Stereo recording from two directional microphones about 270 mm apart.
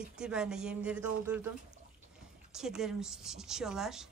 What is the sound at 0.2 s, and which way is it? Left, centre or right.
A woman's voice, centre.